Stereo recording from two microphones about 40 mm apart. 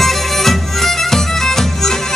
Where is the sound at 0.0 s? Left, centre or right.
Centre.